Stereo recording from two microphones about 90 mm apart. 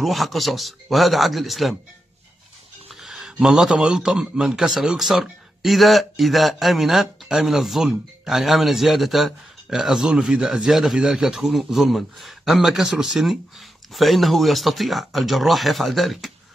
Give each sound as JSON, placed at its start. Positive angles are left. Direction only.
{"t": 0.0, "sound": "a man's voice", "side_deg": 0}
{"t": 2.9, "sound": "a man's voice", "side_deg": -5}